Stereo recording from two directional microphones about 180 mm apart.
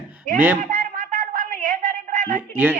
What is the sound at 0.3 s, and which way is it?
Speech, 10° right (ahead or behind).